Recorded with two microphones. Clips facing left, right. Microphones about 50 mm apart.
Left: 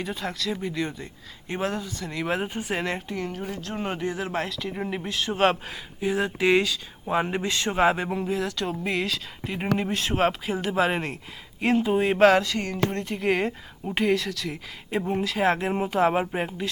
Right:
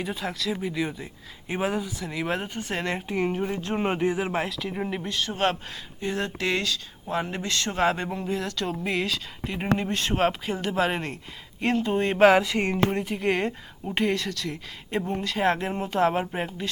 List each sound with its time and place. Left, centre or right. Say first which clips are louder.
0.0 s a woman's voice: even; centre
3.1 s speech: right 5 dB; right
4.3 s a woman's voice: right 1 dB; centre
12.3 s a woman's voice: right 1 dB; centre